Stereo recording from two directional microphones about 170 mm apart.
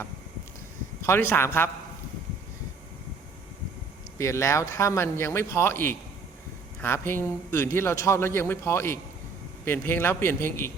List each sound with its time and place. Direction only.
1.0 s a man's voice: 15° left (ahead or behind)
4.2 s a man's voice: 15° left (ahead or behind)